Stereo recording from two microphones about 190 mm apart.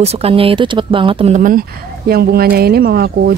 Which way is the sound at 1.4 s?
50° right (ahead or behind).